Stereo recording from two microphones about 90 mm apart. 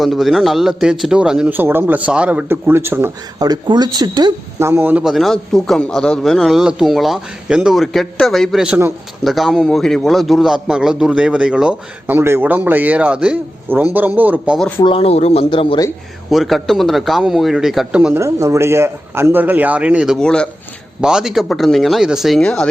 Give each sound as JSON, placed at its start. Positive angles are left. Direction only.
{"t": 0.0, "sound": "a man's voice", "side_deg": 0}
{"t": 1.5, "sound": "a man's voice", "side_deg": -25}
{"t": 2.5, "sound": "a man's voice", "side_deg": -25}
{"t": 3.3, "sound": "speech", "side_deg": -45}
{"t": 4.6, "sound": "a man's voice", "side_deg": -20}
{"t": 5.0, "sound": "a man's voice", "side_deg": 0}
{"t": 12.0, "sound": "a man's voice", "side_deg": -25}
{"t": 14.8, "sound": "speech", "side_deg": 90}
{"t": 16.3, "sound": "a man's voice", "side_deg": 0}
{"t": 18.1, "sound": "a man's voice", "side_deg": -35}
{"t": 20.1, "sound": "speech", "side_deg": 10}
{"t": 21.0, "sound": "a man's voice", "side_deg": -5}
{"t": 22.4, "sound": "speech", "side_deg": 10}